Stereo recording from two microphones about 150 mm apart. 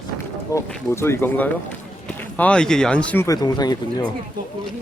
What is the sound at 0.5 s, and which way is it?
Speech, 20° left (ahead or behind).